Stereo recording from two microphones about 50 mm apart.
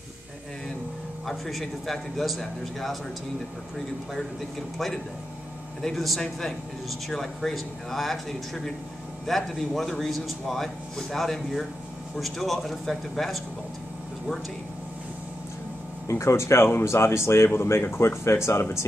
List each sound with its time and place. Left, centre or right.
1.2 s speech: centre
4.7 s speech: centre
16.1 s speech: left